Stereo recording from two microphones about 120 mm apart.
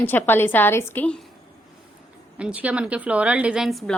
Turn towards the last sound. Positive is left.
turn(degrees=0)  # may be behind; listen again after turning